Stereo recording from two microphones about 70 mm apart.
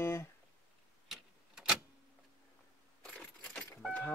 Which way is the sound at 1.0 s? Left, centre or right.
Centre.